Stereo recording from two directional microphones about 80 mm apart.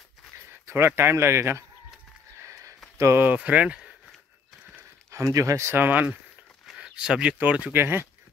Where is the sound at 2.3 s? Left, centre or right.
Right.